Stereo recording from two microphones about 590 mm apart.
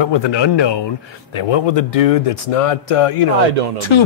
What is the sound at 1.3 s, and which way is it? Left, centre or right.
A man's voice, left.